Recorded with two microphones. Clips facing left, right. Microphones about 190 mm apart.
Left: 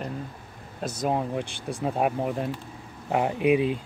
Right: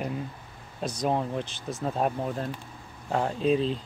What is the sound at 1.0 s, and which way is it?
Speech, 10° left (ahead or behind).